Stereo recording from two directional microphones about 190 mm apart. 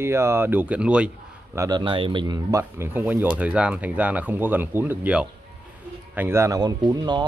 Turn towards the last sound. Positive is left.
turn(degrees=-25)  # may be behind; listen again after turning